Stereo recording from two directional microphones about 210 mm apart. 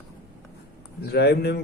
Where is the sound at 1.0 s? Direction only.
50° left (ahead or behind).